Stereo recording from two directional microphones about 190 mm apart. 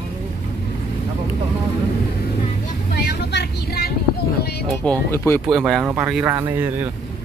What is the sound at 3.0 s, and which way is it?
Speech, 60° left (ahead or behind).